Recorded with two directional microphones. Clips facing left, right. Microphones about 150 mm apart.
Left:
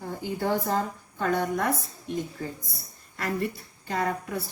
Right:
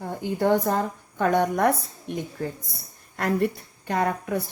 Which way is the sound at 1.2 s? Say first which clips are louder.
Right 5 dB; 55° right (ahead or behind).